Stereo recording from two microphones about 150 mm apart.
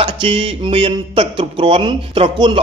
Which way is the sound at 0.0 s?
40° right (ahead or behind).